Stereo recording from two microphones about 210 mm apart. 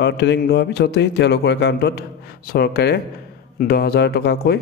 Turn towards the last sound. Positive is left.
turn(degrees=50)  # may be behind; listen again after turning